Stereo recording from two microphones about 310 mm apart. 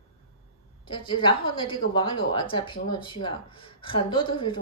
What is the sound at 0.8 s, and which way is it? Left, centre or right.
Speech, centre.